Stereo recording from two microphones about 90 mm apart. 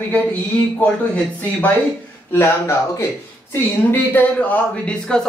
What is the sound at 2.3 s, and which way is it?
Speech, 30° left (ahead or behind).